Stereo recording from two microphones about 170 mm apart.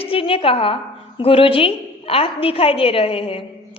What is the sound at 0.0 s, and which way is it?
A woman's voice, 35° left (ahead or behind).